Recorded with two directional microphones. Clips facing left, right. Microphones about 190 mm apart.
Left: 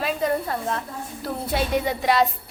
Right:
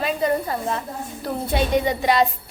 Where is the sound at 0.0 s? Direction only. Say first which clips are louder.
Right 2 dB; centre (ahead or behind).